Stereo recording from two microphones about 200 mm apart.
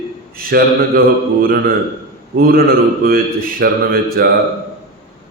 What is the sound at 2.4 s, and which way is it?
Speech, 50° right (ahead or behind).